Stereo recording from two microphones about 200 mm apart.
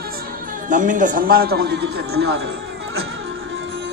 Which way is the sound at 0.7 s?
40° right (ahead or behind).